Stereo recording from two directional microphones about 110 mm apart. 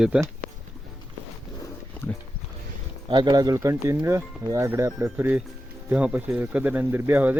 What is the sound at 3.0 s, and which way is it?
Speech, 45° right (ahead or behind).